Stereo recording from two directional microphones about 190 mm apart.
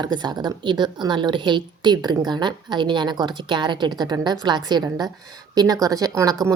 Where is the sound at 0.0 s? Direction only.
20° right (ahead or behind).